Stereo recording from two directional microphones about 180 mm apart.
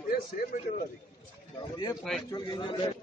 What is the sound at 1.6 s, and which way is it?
A man's voice, 25° left (ahead or behind).